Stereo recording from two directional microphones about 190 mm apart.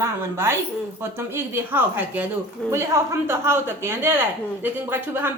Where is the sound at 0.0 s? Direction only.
10° right (ahead or behind).